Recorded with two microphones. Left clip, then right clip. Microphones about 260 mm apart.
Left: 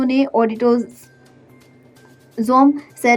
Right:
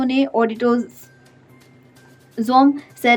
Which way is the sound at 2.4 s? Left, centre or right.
Centre.